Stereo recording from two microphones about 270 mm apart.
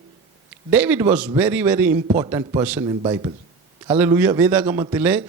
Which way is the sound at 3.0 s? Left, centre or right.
Centre.